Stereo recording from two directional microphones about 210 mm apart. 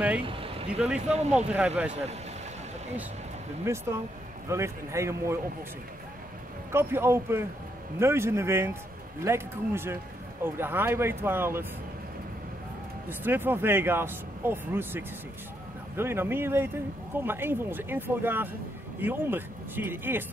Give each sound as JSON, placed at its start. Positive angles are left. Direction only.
{"t": 0.2, "sound": "a sound", "side_deg": -25}
{"t": 0.7, "sound": "speech", "side_deg": -5}
{"t": 3.6, "sound": "speech", "side_deg": -10}
{"t": 6.7, "sound": "speech", "side_deg": -10}
{"t": 13.2, "sound": "speech", "side_deg": -10}